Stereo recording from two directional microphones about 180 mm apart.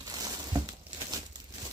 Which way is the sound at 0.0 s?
20° right (ahead or behind).